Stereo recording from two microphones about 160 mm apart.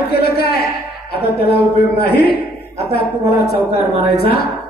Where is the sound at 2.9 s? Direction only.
75° left (ahead or behind).